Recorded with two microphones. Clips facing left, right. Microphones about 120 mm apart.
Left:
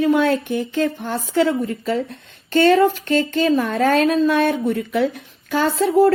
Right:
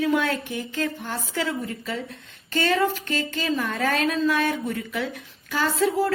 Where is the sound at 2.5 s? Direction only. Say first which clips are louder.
Left 10 dB; 60° left (ahead or behind).